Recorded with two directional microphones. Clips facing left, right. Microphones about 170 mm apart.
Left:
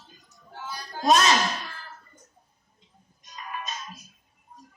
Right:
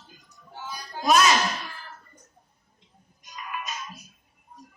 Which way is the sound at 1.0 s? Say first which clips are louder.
Even; 35° left (ahead or behind).